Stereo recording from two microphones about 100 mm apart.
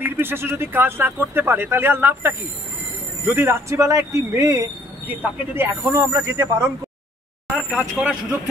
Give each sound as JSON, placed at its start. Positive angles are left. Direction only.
{"t": 0.0, "sound": "a man's voice", "side_deg": -20}
{"t": 5.0, "sound": "a man's voice", "side_deg": -20}
{"t": 7.5, "sound": "a man's voice", "side_deg": 5}